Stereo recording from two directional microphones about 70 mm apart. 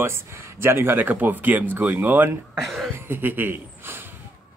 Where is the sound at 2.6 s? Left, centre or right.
Centre.